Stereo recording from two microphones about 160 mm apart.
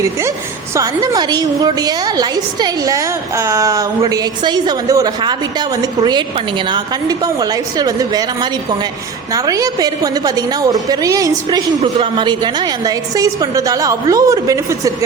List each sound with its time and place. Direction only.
0.0 s a woman's voice: 20° right (ahead or behind)
11.8 s a woman's voice: 30° right (ahead or behind)